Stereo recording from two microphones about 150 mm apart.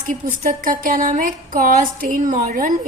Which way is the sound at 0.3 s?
65° right (ahead or behind).